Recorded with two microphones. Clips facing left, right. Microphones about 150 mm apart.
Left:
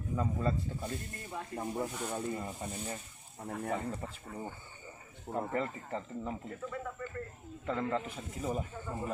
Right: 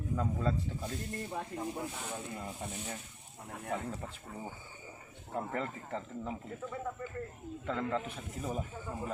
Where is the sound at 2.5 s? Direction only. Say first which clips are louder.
Left 1 dB; 15° left (ahead or behind).